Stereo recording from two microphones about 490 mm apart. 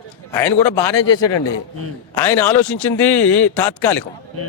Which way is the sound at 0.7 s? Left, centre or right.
Left.